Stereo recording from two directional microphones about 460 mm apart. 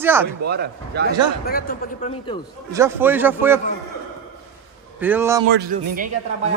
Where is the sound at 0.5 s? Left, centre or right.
Right.